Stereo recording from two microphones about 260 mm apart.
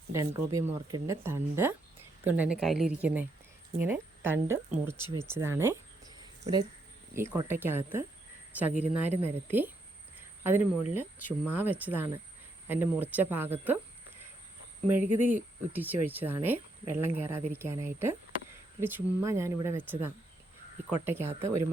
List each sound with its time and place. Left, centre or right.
0.1 s speech: centre
6.1 s a sound: centre
7.2 s speech: centre
15.0 s speech: right
15.7 s speech: centre